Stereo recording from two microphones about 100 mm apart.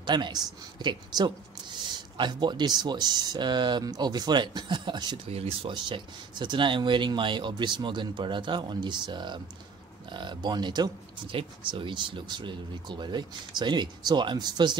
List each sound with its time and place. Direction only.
0.0 s speech: 50° right (ahead or behind)
5.3 s speech: 75° right (ahead or behind); by 10.9 s 45° right (ahead or behind)
11.3 s speech: 55° right (ahead or behind)